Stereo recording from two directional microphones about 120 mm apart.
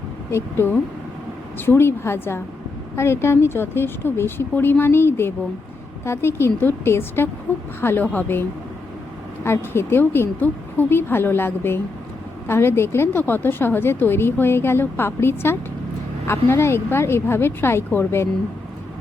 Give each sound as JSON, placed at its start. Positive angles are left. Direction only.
{"t": 0.3, "sound": "a woman's voice", "side_deg": 20}